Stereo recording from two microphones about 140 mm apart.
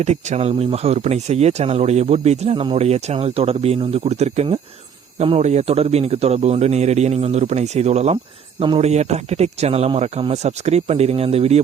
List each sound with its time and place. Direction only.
0.0 s speech: 50° right (ahead or behind)